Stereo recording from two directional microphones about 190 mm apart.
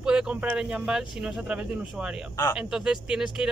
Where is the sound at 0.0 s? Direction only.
5° right (ahead or behind).